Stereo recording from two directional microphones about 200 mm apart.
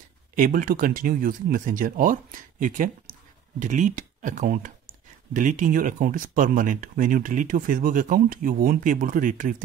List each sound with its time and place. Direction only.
0.4 s speech: 40° right (ahead or behind)